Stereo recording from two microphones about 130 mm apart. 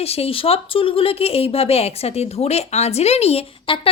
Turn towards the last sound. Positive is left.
turn(degrees=55)  # may be behind; listen again after turning